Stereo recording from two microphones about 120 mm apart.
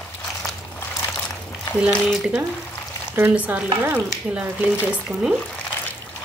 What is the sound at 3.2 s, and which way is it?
Speech, 15° right (ahead or behind).